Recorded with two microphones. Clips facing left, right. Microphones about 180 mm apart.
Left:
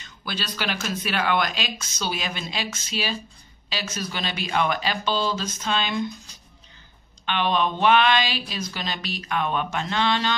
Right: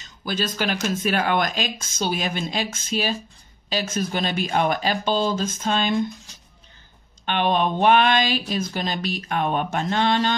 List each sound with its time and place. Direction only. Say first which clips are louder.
0.2 s speech: right 5 dB; 45° right (ahead or behind)
7.2 s speech: right 2 dB; 50° right (ahead or behind)